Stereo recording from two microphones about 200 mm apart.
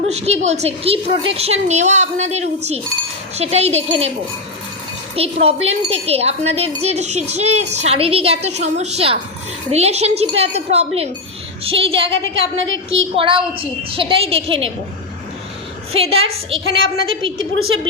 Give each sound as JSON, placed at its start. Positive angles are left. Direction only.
{"t": 0.1, "sound": "speech", "side_deg": -35}
{"t": 5.1, "sound": "a woman's voice", "side_deg": -30}
{"t": 12.4, "sound": "a woman's voice", "side_deg": -70}
{"t": 13.1, "sound": "a woman's voice", "side_deg": -25}
{"t": 15.9, "sound": "a woman's voice", "side_deg": -30}
{"t": 17.3, "sound": "a woman's voice", "side_deg": -90}